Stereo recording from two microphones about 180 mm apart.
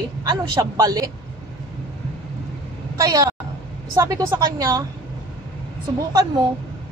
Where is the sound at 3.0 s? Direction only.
20° right (ahead or behind).